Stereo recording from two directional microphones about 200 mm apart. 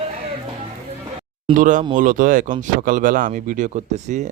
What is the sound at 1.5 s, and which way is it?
Speech, 40° right (ahead or behind).